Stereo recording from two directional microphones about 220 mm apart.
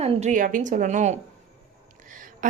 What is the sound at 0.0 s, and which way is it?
A woman's voice, 30° right (ahead or behind).